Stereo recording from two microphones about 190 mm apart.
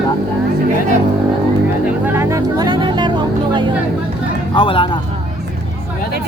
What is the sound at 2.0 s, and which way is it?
Speech, 10° right (ahead or behind).